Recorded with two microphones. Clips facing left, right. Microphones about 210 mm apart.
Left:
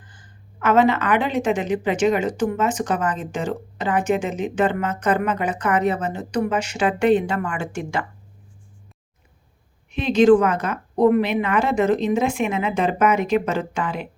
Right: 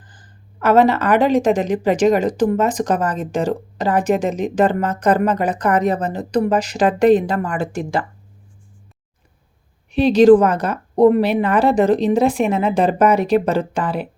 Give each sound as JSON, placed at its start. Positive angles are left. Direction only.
{"t": 0.1, "sound": "a woman's voice", "side_deg": -35}
{"t": 9.9, "sound": "a woman's voice", "side_deg": -35}